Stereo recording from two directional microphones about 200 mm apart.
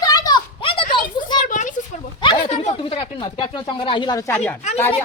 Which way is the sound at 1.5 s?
40° left (ahead or behind).